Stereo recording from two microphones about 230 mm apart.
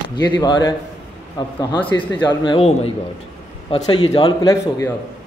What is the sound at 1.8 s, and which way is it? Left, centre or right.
Speech, centre.